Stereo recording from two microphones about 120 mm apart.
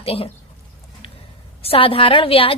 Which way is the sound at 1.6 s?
50° left (ahead or behind).